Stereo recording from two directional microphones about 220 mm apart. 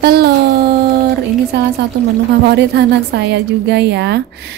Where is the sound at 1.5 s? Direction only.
50° right (ahead or behind).